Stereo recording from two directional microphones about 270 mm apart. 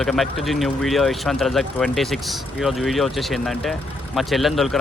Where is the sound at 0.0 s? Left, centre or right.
Centre.